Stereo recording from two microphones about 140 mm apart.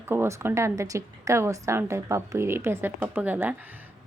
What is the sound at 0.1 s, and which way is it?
A woman's voice, 20° right (ahead or behind).